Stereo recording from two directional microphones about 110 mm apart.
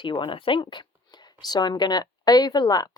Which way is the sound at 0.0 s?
50° left (ahead or behind).